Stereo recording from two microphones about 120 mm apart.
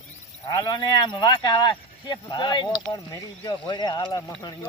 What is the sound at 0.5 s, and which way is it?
Speech, 35° left (ahead or behind).